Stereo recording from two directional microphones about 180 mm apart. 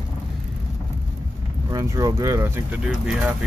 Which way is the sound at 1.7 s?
20° right (ahead or behind).